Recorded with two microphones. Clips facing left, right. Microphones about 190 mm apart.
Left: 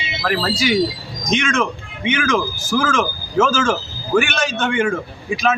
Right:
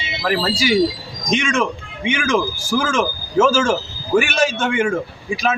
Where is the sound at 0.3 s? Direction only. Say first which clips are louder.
Right 1 dB; 10° right (ahead or behind).